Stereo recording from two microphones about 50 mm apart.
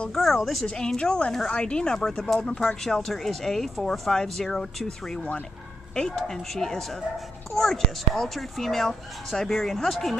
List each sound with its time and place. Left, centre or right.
0.1 s a woman's voice: centre
0.7 s speech: centre
2.0 s speech: centre